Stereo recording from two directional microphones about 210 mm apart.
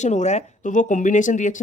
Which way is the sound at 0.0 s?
35° left (ahead or behind).